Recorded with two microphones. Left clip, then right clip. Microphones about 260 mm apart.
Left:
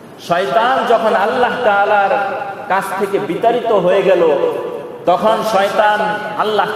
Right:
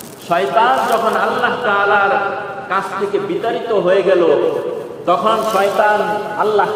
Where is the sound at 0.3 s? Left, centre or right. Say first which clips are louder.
Even; left.